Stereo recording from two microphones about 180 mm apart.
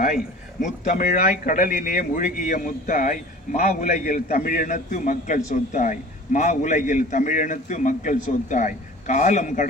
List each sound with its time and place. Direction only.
0.6 s speech: 45° left (ahead or behind)